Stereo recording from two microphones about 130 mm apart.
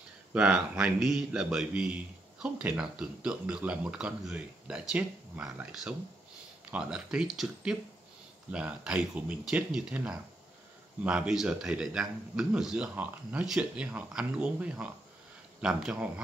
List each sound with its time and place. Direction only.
0.3 s a man's voice: 10° right (ahead or behind)
8.5 s a man's voice: 10° right (ahead or behind)